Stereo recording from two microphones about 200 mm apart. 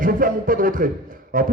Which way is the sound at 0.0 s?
45° right (ahead or behind).